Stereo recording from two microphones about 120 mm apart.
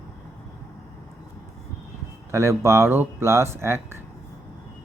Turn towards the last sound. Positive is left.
turn(degrees=-20)  # may be behind; listen again after turning